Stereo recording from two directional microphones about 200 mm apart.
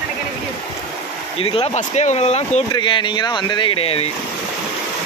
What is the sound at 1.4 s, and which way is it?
Speech, 30° left (ahead or behind).